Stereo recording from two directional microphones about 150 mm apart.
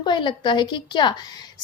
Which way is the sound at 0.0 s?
30° left (ahead or behind).